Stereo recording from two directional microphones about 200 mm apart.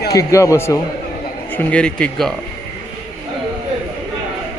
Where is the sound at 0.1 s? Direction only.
15° left (ahead or behind).